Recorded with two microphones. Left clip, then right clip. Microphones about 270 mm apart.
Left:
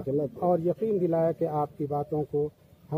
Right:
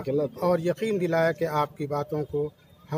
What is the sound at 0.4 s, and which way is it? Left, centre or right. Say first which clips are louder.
Speech: left 1 dB; right.